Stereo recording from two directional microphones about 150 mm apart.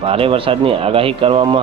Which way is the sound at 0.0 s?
40° right (ahead or behind).